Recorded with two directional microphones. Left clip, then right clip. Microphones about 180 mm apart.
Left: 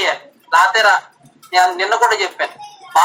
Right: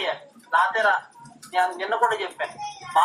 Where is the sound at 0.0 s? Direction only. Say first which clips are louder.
Left 9 dB; 45° left (ahead or behind).